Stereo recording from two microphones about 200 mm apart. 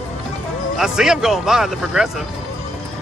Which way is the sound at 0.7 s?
5° right (ahead or behind).